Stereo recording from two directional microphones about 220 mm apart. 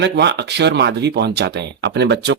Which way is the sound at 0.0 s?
50° right (ahead or behind).